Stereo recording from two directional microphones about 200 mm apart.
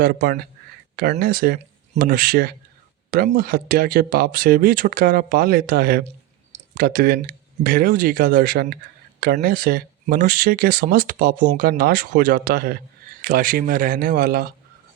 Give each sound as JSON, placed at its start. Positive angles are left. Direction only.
{"t": 0.0, "sound": "speech", "side_deg": -45}